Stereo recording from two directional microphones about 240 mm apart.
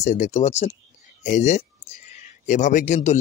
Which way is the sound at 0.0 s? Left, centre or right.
Left.